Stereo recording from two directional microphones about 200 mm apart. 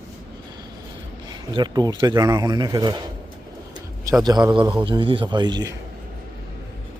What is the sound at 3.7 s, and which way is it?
Bird, 15° right (ahead or behind).